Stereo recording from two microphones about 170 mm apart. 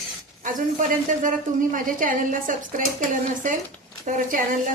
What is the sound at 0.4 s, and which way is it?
A woman's voice, 50° right (ahead or behind).